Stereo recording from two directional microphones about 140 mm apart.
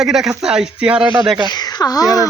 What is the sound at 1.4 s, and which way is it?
Speech, 30° left (ahead or behind).